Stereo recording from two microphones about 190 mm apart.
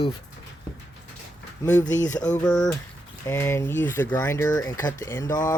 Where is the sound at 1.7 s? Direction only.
15° left (ahead or behind).